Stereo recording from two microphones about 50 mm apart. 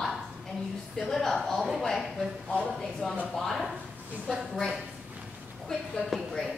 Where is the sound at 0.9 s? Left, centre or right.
Centre.